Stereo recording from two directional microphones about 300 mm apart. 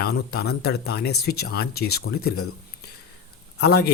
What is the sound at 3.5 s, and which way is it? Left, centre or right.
Speech, left.